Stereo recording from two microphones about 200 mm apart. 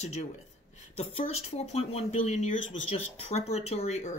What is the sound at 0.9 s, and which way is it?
Speech, 30° left (ahead or behind).